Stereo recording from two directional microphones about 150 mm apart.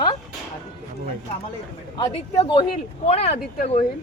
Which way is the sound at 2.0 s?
25° left (ahead or behind).